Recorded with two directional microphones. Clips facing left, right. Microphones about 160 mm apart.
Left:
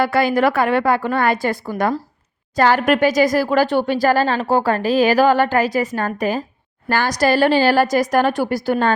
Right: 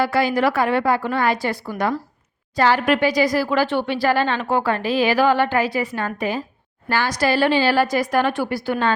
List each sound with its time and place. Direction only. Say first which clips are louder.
0.0 s speech: left 3 dB; 55° left (ahead or behind)